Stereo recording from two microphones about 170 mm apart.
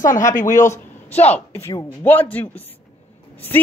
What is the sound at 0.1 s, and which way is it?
Speech, 50° left (ahead or behind).